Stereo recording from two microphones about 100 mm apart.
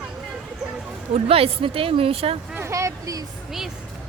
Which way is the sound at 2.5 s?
30° right (ahead or behind).